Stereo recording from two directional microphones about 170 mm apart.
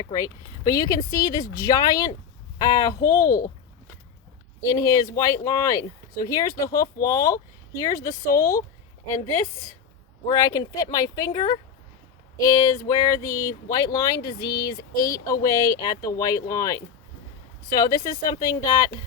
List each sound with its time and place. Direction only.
0.1 s speech: 20° left (ahead or behind)
3.2 s speech: 55° left (ahead or behind)
4.6 s speech: 20° left (ahead or behind)